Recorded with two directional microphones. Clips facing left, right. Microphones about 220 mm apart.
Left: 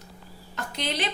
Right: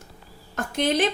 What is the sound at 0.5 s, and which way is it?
Speech, 50° right (ahead or behind).